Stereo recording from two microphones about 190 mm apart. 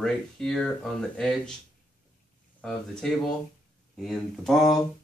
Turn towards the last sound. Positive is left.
turn(degrees=0)  # may be behind; listen again after turning